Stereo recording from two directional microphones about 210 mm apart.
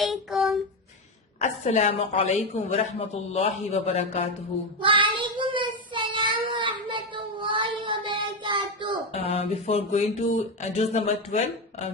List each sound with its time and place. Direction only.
0.0 s child singing: centre (ahead or behind)
1.4 s a woman's voice: 30° left (ahead or behind)
4.8 s child singing: 25° right (ahead or behind)
9.2 s a woman's voice: 30° left (ahead or behind)